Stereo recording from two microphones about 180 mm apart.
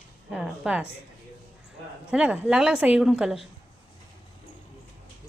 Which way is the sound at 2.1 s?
5° right (ahead or behind).